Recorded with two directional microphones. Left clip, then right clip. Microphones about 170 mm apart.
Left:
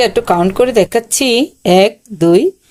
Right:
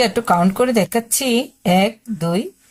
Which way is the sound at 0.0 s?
30° left (ahead or behind).